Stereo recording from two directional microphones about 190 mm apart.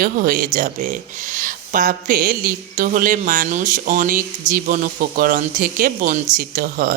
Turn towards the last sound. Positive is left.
turn(degrees=-50)  # may be behind; listen again after turning